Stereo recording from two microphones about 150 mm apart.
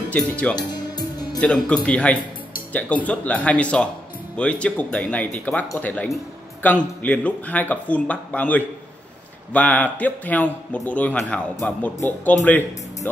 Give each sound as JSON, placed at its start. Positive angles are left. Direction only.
{"t": 0.1, "sound": "speech", "side_deg": 10}
{"t": 0.6, "sound": "music", "side_deg": 25}
{"t": 1.4, "sound": "speech", "side_deg": 5}